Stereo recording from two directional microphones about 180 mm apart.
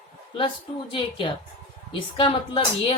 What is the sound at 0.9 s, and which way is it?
Speech, 25° left (ahead or behind).